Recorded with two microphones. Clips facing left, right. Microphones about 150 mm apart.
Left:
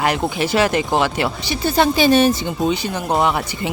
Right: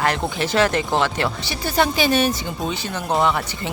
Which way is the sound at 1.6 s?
30° left (ahead or behind).